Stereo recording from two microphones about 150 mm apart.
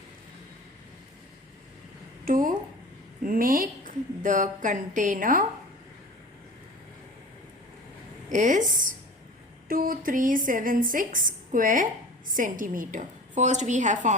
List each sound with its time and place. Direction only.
2.2 s a woman's voice: 65° right (ahead or behind)
8.3 s a woman's voice: 60° right (ahead or behind)
9.6 s a woman's voice: 75° right (ahead or behind); by 14.2 s 55° right (ahead or behind)